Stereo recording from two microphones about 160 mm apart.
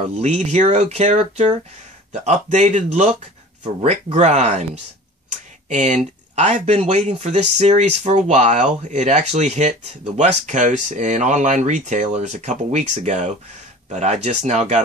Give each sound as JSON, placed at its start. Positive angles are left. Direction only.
{"t": 0.0, "sound": "speech", "side_deg": -45}